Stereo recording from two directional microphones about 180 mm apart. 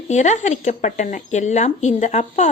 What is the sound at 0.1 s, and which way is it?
Speech, 40° left (ahead or behind).